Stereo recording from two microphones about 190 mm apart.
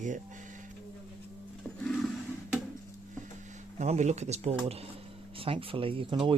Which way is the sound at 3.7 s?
35° right (ahead or behind).